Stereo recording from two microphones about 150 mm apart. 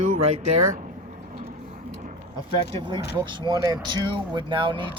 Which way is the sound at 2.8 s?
35° right (ahead or behind).